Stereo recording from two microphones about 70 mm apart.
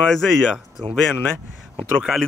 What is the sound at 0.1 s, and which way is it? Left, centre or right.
Speech, centre.